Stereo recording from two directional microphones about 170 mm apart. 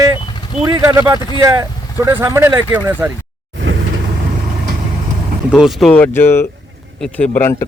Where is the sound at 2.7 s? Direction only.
10° right (ahead or behind).